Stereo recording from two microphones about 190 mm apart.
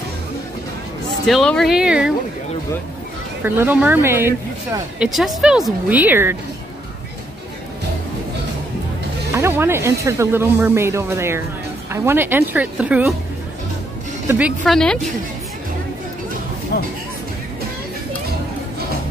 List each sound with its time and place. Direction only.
1.2 s speech: centre (ahead or behind)
3.4 s speech: 10° right (ahead or behind)
9.3 s speech: 15° right (ahead or behind)
14.2 s speech: 10° right (ahead or behind)
14.6 s speech: 5° left (ahead or behind)
16.7 s speech: 60° left (ahead or behind)